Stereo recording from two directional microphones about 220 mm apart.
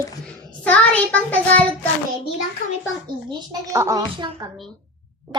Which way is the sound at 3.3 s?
15° right (ahead or behind).